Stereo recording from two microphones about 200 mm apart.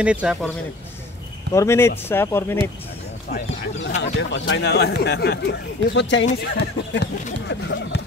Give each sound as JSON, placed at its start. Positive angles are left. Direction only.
{"t": 0.0, "sound": "speech", "side_deg": -5}
{"t": 1.5, "sound": "speech", "side_deg": 15}
{"t": 4.0, "sound": "speech", "side_deg": 65}